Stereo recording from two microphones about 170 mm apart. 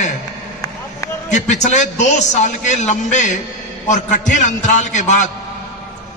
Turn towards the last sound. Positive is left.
turn(degrees=45)  # may be behind; listen again after turning